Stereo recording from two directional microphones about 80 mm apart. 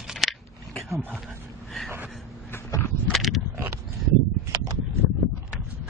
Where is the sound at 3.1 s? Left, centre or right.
Centre.